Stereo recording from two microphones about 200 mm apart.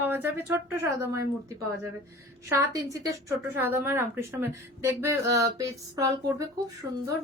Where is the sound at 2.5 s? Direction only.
15° right (ahead or behind).